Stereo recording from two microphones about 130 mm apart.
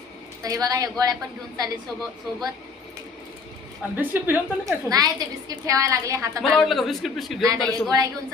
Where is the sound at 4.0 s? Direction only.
15° right (ahead or behind).